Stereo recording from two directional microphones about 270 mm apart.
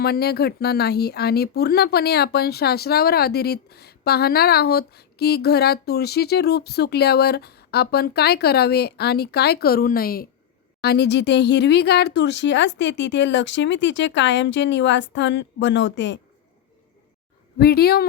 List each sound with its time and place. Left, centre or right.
0.0 s speech: left
17.6 s speech: left